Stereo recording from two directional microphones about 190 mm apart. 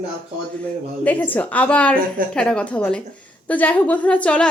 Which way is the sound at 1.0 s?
10° left (ahead or behind).